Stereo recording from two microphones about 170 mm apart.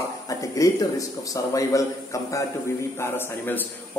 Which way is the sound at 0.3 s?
20° left (ahead or behind).